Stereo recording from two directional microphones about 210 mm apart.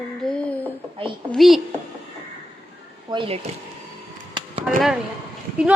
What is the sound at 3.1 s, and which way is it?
Speech, 25° right (ahead or behind).